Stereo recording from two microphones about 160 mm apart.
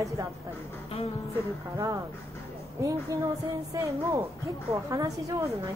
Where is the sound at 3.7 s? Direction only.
25° right (ahead or behind).